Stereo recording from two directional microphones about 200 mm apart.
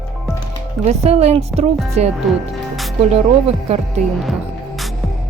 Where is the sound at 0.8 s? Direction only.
35° right (ahead or behind).